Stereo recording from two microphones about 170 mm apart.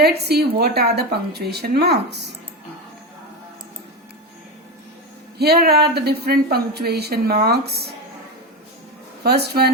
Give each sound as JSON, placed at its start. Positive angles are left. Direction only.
{"t": 0.0, "sound": "speech", "side_deg": -70}
{"t": 5.4, "sound": "speech", "side_deg": -70}
{"t": 9.2, "sound": "speech", "side_deg": -70}